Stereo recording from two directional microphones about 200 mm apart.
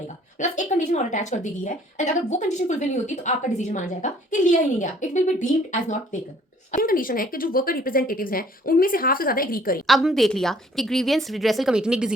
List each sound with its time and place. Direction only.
0.3 s speech: 35° left (ahead or behind)
9.8 s a woman's voice: centre (ahead or behind)